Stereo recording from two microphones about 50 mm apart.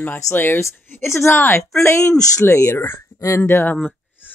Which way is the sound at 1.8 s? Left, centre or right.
Left.